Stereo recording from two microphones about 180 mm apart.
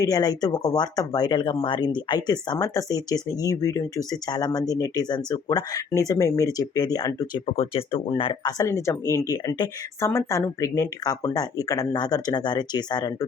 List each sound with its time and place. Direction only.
0.0 s speech: 20° left (ahead or behind)